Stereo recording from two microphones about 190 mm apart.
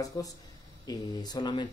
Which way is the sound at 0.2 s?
20° left (ahead or behind).